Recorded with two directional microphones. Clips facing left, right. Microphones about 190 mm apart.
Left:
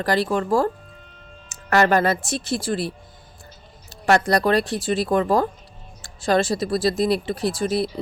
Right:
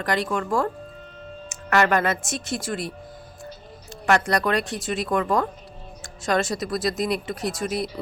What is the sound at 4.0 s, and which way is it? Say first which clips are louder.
Speech: left 3 dB; 35° left (ahead or behind).